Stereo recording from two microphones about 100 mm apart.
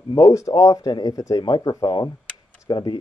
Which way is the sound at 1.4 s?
45° left (ahead or behind).